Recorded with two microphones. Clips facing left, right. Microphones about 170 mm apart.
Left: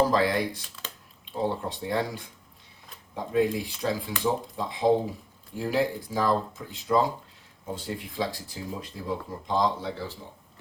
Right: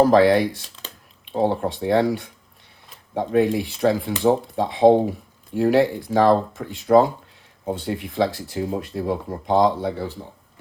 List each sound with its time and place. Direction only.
0.0 s speech: 65° right (ahead or behind)